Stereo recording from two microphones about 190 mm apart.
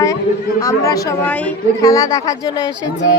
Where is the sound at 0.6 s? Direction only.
15° left (ahead or behind).